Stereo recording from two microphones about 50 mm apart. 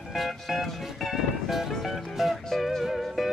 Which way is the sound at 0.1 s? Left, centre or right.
Centre.